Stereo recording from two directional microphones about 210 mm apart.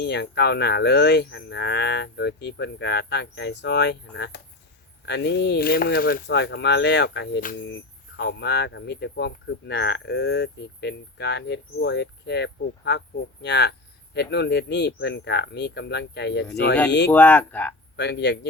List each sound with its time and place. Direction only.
0.0 s speech: 55° left (ahead or behind)
17.1 s speech: 10° left (ahead or behind)
17.9 s speech: 55° left (ahead or behind)